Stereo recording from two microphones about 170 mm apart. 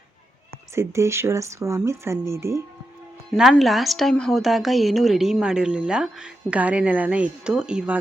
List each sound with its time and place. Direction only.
0.8 s speech: 15° right (ahead or behind)
3.5 s a woman's voice: centre (ahead or behind)